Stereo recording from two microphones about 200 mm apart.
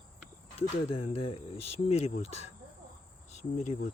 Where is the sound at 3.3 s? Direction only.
35° left (ahead or behind).